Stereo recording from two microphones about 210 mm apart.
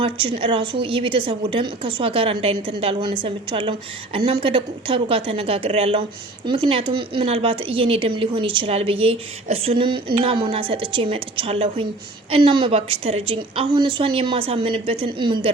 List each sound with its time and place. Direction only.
0.0 s a woman's voice: 25° right (ahead or behind)